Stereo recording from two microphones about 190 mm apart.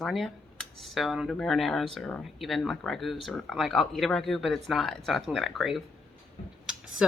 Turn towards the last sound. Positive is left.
turn(degrees=-5)  # may be behind; listen again after turning